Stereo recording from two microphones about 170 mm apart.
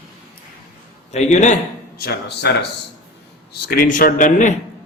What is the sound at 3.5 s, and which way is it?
A man's voice, 60° left (ahead or behind).